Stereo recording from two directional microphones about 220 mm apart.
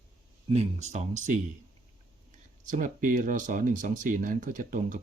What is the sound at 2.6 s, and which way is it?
Speech, 35° right (ahead or behind).